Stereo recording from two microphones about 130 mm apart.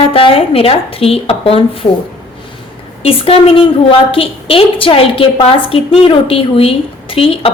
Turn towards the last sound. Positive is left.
turn(degrees=45)  # may be behind; listen again after turning